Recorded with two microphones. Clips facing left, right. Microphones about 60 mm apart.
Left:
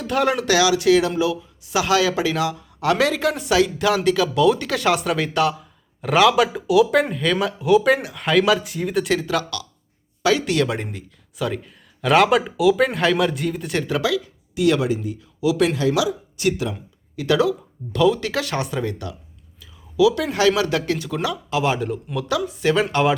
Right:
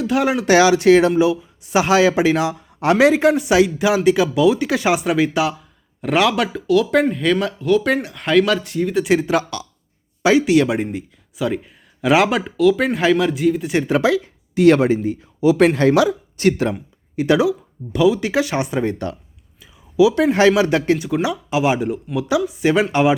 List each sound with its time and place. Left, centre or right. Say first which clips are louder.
0.0 s speech: right 2 dB; centre
0.4 s speech: right 8 dB; right; by 9.0 s centre
9.0 s speech: right 5 dB; right
10.4 s speech: right 6 dB; centre
13.8 s speech: right 5 dB; right
17.2 s speech: right 3 dB; right
17.9 s speech: right 3 dB; centre